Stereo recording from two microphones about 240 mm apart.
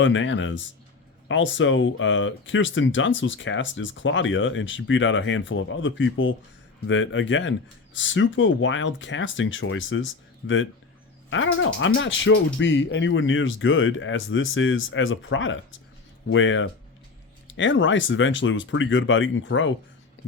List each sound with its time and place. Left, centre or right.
0.0 s speech: left